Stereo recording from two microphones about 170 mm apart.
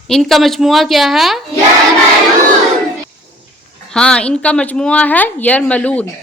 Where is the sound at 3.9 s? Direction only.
5° left (ahead or behind).